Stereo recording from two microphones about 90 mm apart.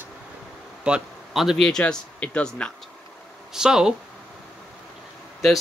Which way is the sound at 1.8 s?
15° left (ahead or behind).